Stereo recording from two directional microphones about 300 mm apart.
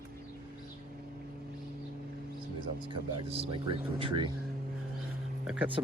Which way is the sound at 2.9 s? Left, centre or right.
Centre.